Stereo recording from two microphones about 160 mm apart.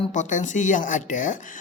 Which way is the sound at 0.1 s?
50° left (ahead or behind).